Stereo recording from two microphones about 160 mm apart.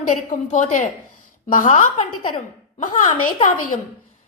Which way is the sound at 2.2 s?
30° left (ahead or behind).